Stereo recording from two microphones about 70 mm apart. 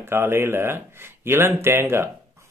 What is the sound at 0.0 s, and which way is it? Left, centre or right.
A man's voice, right.